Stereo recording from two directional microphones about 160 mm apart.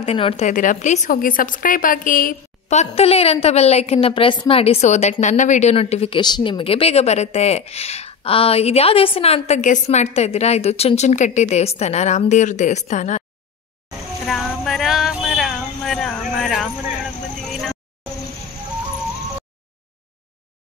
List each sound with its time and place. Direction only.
0.0 s a woman's voice: 40° left (ahead or behind)
0.5 s a woman's voice: 55° left (ahead or behind)
2.7 s a woman's voice: 40° left (ahead or behind)
14.2 s a sound: centre (ahead or behind)
17.5 s vehicle: centre (ahead or behind)